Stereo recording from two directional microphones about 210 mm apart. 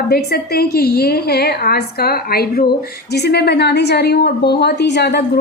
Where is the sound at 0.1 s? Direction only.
50° left (ahead or behind).